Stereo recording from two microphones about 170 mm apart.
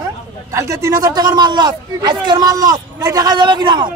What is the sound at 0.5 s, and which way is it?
A man's voice, 20° right (ahead or behind).